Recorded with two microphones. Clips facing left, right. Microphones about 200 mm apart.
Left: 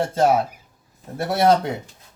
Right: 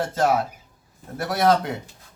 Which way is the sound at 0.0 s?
30° left (ahead or behind).